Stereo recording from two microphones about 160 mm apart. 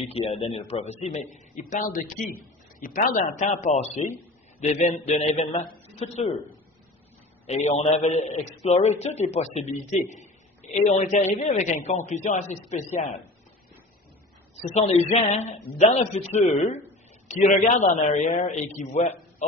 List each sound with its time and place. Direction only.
0.0 s a man's voice: 40° left (ahead or behind)
7.4 s a man's voice: 45° left (ahead or behind)
14.6 s a man's voice: 45° left (ahead or behind)